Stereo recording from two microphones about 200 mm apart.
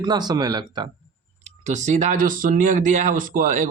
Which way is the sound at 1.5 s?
35° right (ahead or behind).